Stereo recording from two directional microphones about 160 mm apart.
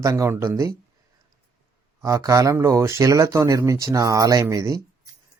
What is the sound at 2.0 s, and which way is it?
Speech, 20° right (ahead or behind).